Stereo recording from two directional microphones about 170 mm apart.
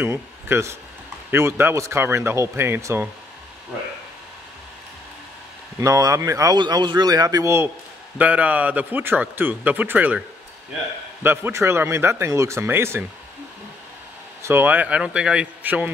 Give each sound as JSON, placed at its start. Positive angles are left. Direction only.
{"t": 0.0, "sound": "speech", "side_deg": -15}
{"t": 5.8, "sound": "speech", "side_deg": -20}
{"t": 11.2, "sound": "speech", "side_deg": -15}
{"t": 14.4, "sound": "speech", "side_deg": -10}